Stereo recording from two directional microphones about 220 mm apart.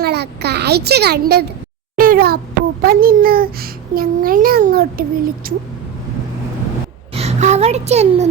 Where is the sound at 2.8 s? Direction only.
40° right (ahead or behind).